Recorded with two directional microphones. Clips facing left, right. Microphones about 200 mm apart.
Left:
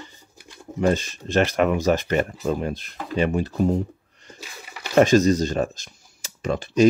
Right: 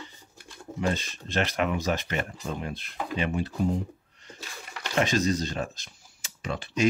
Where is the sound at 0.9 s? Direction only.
45° left (ahead or behind).